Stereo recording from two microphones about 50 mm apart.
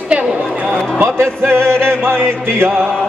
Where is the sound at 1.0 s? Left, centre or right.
Right.